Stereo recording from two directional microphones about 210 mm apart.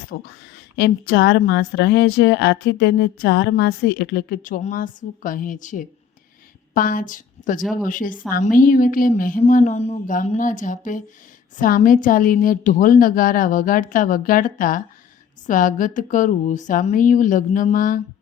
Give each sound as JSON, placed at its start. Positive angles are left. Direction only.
{"t": 0.1, "sound": "a woman's voice", "side_deg": 50}